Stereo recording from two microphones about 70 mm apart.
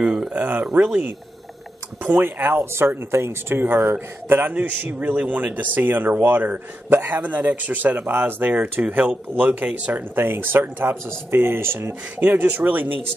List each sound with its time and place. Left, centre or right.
0.0 s speech: centre
0.4 s speech: right
2.0 s a man's voice: right
12.2 s speech: right